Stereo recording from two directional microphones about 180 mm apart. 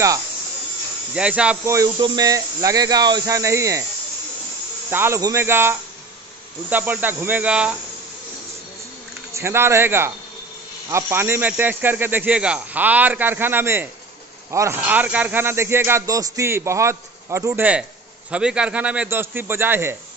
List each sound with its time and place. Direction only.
1.1 s speech: 5° right (ahead or behind)
1.8 s speech: 25° right (ahead or behind)
4.9 s speech: 15° right (ahead or behind)
9.3 s speech: 15° right (ahead or behind)
18.3 s speech: 5° right (ahead or behind)